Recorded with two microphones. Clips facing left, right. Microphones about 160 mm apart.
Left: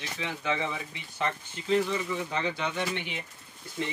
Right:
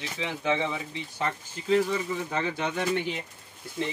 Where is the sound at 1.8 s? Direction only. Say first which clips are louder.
Right 1 dB; 40° right (ahead or behind).